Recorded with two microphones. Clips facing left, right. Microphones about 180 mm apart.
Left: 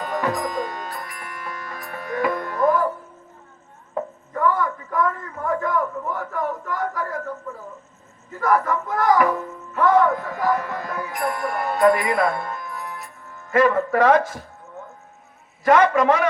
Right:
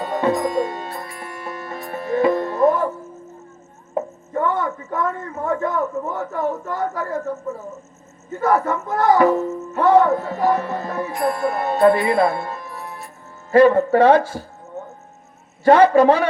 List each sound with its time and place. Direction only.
0.0 s music: 25° right (ahead or behind)
3.9 s speech: 25° right (ahead or behind)
15.6 s a man's voice: 30° right (ahead or behind)